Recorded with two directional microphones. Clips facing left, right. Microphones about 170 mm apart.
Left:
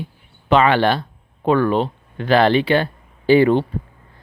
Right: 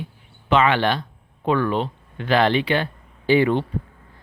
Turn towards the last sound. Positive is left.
turn(degrees=35)  # may be behind; listen again after turning